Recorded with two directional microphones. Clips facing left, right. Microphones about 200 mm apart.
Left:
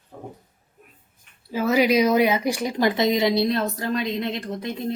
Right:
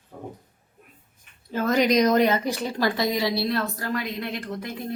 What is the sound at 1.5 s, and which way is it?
A woman's voice, 10° left (ahead or behind).